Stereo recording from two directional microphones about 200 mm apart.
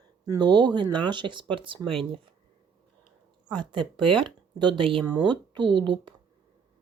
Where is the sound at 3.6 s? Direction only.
25° right (ahead or behind).